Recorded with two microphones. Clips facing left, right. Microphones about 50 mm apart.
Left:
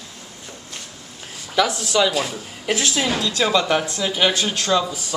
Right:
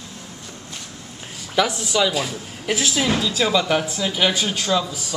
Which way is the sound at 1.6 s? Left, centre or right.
Centre.